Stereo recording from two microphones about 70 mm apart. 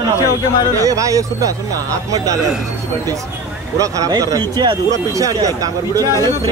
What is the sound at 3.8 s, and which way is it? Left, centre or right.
Speech, right.